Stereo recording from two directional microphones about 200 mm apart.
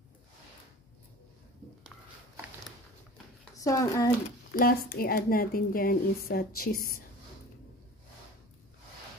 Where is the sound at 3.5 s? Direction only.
15° left (ahead or behind).